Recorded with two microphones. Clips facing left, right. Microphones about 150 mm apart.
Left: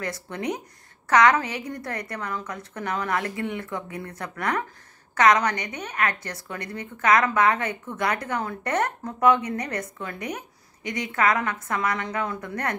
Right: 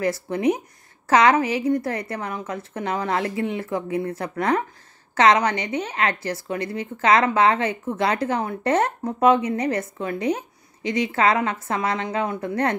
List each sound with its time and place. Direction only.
0.0 s a woman's voice: 25° right (ahead or behind)